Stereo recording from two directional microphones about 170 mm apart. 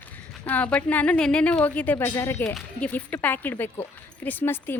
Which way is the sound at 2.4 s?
5° left (ahead or behind).